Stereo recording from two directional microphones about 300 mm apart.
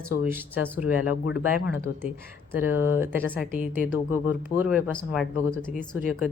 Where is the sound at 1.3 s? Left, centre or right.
Left.